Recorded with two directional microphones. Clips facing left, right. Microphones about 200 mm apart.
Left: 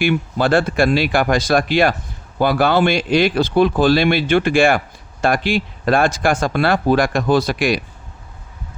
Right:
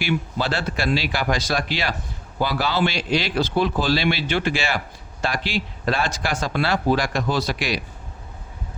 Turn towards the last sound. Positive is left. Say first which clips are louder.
# left 8 dB
turn(degrees=50)  # may be behind; listen again after turning